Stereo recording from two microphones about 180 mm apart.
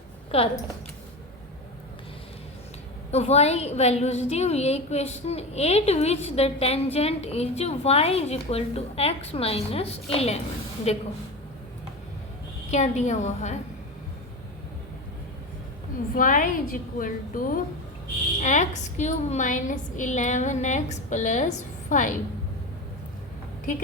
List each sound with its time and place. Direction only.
0.3 s a woman's voice: 35° left (ahead or behind)
3.1 s a woman's voice: 35° left (ahead or behind)
12.7 s a woman's voice: 40° left (ahead or behind)
16.1 s a woman's voice: 50° left (ahead or behind)